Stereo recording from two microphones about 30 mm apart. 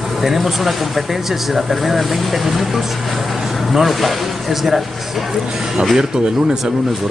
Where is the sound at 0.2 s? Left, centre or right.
Centre.